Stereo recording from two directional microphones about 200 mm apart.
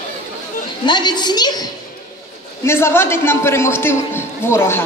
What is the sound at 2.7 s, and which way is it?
A woman's voice, 10° left (ahead or behind).